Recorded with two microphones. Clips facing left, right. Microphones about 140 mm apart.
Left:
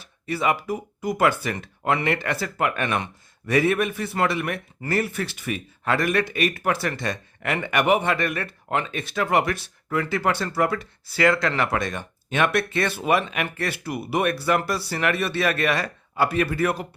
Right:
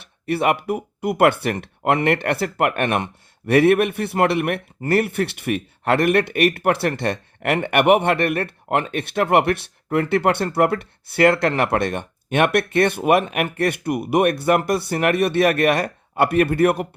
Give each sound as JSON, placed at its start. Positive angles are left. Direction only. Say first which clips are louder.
{"t": 0.0, "sound": "speech", "louder": "right 4 dB", "side_deg": -60}